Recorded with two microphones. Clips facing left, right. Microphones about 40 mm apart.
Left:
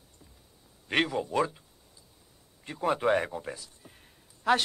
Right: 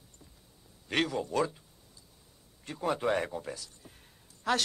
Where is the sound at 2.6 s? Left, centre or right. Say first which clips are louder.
Left 3 dB; centre.